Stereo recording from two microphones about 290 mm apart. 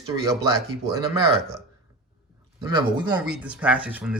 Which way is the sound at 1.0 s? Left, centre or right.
Centre.